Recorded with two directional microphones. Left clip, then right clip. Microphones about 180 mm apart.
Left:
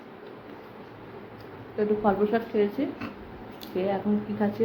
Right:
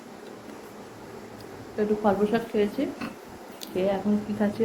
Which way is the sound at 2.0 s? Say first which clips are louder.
Right 2 dB; 5° right (ahead or behind).